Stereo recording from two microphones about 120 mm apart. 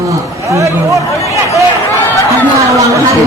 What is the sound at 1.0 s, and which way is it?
Speech, 25° left (ahead or behind).